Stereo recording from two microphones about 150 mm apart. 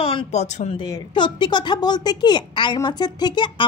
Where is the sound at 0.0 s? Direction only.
35° left (ahead or behind).